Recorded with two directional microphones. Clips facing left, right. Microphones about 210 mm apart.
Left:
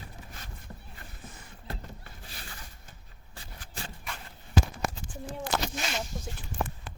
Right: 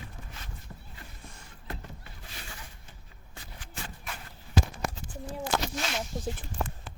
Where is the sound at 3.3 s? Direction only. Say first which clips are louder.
Even; 35° left (ahead or behind).